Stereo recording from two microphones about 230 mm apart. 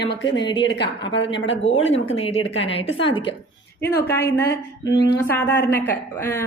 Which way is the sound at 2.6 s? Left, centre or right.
Left.